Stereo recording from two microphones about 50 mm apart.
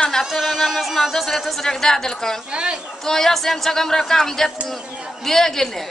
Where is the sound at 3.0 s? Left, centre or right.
Centre.